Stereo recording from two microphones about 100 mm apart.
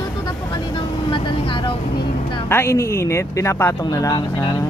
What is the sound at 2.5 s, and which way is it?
Speech, 25° left (ahead or behind).